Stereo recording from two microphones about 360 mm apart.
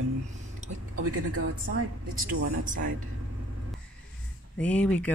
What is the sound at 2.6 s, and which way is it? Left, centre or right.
Speech, right.